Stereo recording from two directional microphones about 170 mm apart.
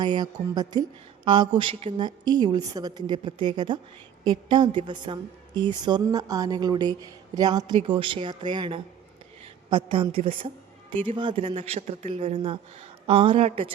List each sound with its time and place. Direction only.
0.0 s a woman's voice: 25° right (ahead or behind)